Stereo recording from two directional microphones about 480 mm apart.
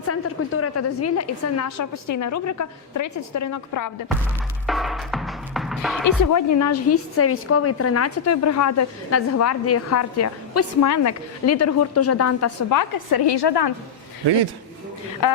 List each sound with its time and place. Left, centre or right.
0.1 s a woman's voice: left
4.6 s music: centre
6.3 s a woman's voice: left
15.2 s speech: left